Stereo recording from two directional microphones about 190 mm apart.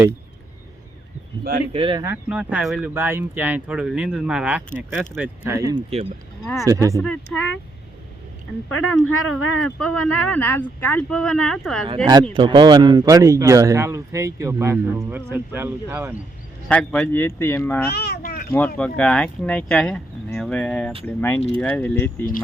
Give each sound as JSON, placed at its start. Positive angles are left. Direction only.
{"t": 1.7, "sound": "speech", "side_deg": -25}
{"t": 2.3, "sound": "speech", "side_deg": -5}
{"t": 6.4, "sound": "speech", "side_deg": 0}
{"t": 6.7, "sound": "speech", "side_deg": -15}
{"t": 8.7, "sound": "speech", "side_deg": 90}
{"t": 9.6, "sound": "speech", "side_deg": 5}
{"t": 12.3, "sound": "speech", "side_deg": -25}
{"t": 16.6, "sound": "speech", "side_deg": 5}
{"t": 17.9, "sound": "cat", "side_deg": 55}
{"t": 18.8, "sound": "speech", "side_deg": 5}